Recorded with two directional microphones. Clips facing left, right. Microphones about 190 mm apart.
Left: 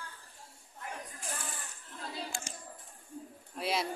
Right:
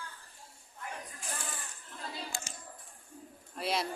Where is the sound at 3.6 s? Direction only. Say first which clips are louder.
Even; centre (ahead or behind).